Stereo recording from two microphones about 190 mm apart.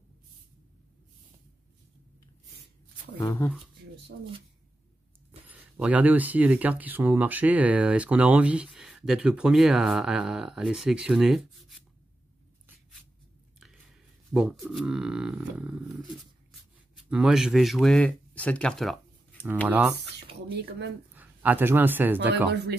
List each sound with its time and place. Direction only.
3.2 s speech: 15° left (ahead or behind)
5.5 s speech: 10° right (ahead or behind)
13.6 s speech: centre (ahead or behind)
19.7 s speech: 5° right (ahead or behind)
21.1 s a man's voice: 10° right (ahead or behind)
22.5 s speech: 60° right (ahead or behind)